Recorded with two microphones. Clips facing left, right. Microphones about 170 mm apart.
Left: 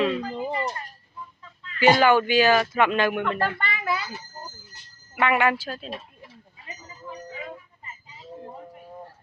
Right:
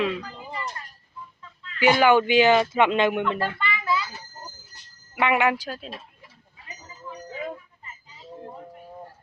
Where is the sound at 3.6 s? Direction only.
45° left (ahead or behind).